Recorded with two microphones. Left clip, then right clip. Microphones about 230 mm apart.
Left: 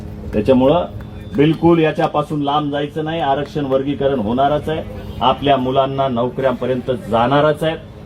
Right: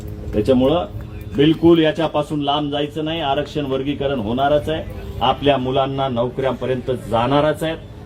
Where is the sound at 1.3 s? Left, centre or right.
Centre.